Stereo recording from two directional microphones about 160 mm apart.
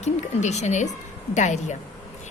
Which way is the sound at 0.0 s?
45° left (ahead or behind).